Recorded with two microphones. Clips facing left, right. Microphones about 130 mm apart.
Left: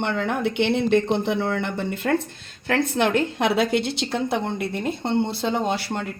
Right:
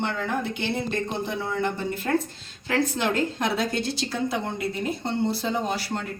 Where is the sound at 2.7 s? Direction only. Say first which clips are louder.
Left 3 dB; 60° left (ahead or behind).